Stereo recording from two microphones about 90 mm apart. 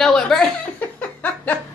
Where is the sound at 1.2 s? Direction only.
20° left (ahead or behind).